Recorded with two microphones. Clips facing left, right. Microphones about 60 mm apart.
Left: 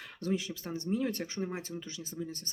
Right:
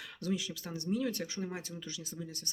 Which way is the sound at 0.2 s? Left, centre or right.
Left.